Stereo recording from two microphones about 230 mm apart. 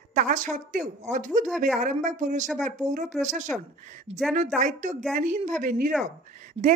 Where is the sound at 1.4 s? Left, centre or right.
Centre.